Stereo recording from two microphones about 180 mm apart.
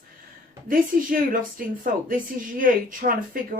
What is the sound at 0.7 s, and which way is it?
Speech, 50° right (ahead or behind).